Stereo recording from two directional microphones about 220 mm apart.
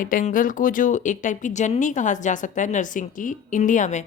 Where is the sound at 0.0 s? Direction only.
35° left (ahead or behind).